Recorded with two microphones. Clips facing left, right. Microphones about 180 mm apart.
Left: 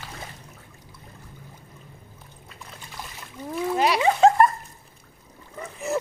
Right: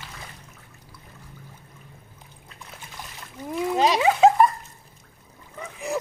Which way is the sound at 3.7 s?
25° right (ahead or behind).